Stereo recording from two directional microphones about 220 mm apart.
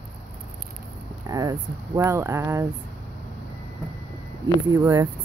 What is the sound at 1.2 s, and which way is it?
Speech, 15° right (ahead or behind).